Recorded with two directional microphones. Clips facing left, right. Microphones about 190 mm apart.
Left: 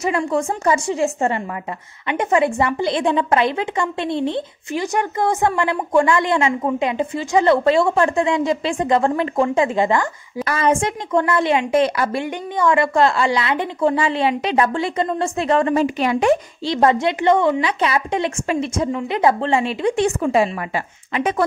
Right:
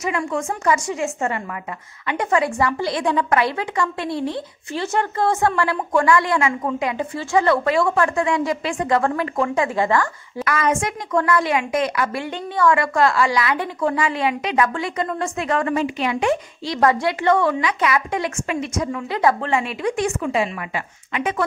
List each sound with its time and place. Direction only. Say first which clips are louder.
0.0 s a woman's voice: left 4 dB; 30° left (ahead or behind)
16.6 s a woman's voice: left 2 dB; 25° left (ahead or behind)